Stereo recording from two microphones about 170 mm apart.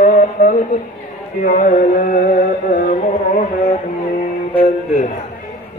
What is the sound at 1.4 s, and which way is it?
Music, 50° left (ahead or behind).